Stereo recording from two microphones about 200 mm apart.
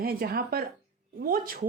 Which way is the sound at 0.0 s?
50° right (ahead or behind).